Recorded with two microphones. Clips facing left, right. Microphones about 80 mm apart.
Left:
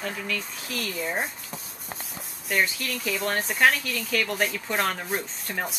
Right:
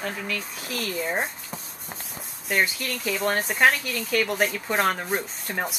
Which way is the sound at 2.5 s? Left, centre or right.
Centre.